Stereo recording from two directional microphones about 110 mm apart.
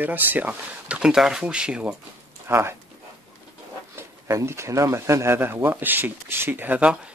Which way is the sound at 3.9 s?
25° right (ahead or behind).